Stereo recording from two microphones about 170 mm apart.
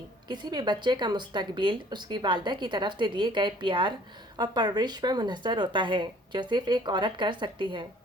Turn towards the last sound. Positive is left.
turn(degrees=-30)  # may be behind; listen again after turning